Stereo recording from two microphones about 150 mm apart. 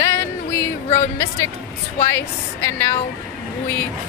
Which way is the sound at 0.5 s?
20° left (ahead or behind).